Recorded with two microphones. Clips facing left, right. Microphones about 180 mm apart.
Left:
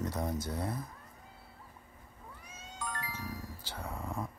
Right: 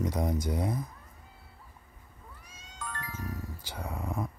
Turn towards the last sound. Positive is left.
turn(degrees=-15)  # may be behind; listen again after turning